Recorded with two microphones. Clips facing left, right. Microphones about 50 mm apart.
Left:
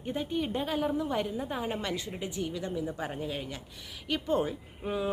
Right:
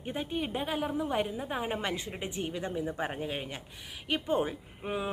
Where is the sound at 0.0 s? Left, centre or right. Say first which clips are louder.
Left 2 dB; centre.